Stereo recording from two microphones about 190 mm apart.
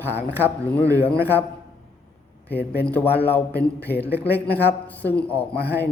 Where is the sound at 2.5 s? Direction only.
55° left (ahead or behind).